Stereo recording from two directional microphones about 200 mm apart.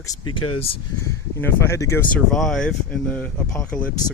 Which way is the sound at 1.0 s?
15° left (ahead or behind).